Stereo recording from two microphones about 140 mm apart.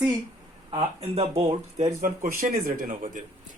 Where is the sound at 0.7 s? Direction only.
45° right (ahead or behind).